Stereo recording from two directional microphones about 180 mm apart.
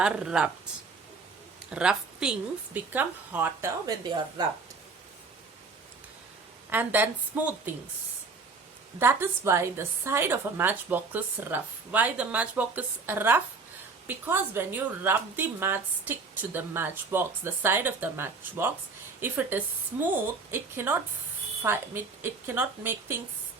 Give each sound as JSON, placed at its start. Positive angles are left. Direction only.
{"t": 0.0, "sound": "speech", "side_deg": -5}
{"t": 1.7, "sound": "a woman's voice", "side_deg": -5}
{"t": 4.4, "sound": "speech", "side_deg": -20}
{"t": 6.7, "sound": "a woman's voice", "side_deg": -10}
{"t": 9.0, "sound": "a woman's voice", "side_deg": -15}